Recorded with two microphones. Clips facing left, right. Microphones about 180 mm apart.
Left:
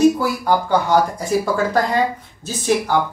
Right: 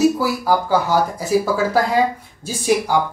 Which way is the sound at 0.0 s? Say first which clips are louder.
Left 1 dB; 5° right (ahead or behind).